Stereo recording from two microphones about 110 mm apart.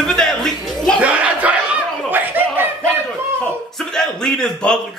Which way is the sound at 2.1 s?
20° right (ahead or behind).